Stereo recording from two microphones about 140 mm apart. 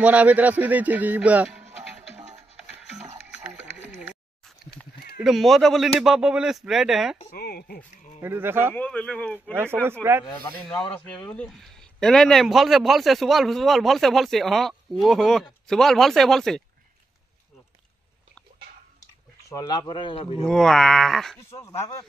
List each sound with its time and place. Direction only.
0.0 s speech: 10° right (ahead or behind)
1.6 s music: 50° right (ahead or behind)
5.2 s speech: centre (ahead or behind)
7.6 s speech: 80° left
8.2 s speech: 15° right (ahead or behind)
8.7 s speech: 10° left (ahead or behind)
9.5 s speech: 15° right (ahead or behind)
10.7 s speech: 5° left (ahead or behind)
19.5 s speech: 25° left (ahead or behind); by 20.4 s 40° left (ahead or behind)
20.4 s speech: 5° left (ahead or behind)
21.5 s speech: 20° left (ahead or behind)